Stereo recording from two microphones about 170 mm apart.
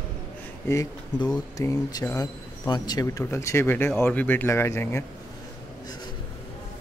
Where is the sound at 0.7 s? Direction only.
20° left (ahead or behind).